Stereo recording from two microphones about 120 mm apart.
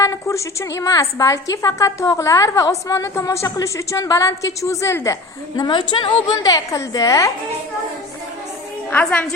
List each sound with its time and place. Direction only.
0.0 s a woman's voice: 25° left (ahead or behind)
5.5 s a woman's voice: 40° left (ahead or behind)
8.9 s a woman's voice: 15° left (ahead or behind)